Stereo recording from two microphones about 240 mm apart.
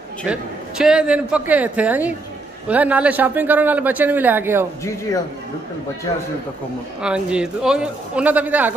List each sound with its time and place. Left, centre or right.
0.3 s a man's voice: centre
6.1 s a man's voice: centre
7.0 s a man's voice: centre